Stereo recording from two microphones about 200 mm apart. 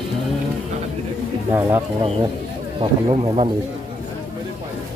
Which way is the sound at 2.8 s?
25° right (ahead or behind).